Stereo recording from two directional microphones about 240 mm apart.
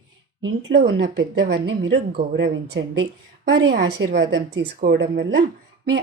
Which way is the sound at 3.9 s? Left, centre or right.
Right.